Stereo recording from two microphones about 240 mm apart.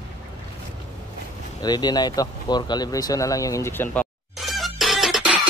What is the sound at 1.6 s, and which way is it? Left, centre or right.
Speech, centre.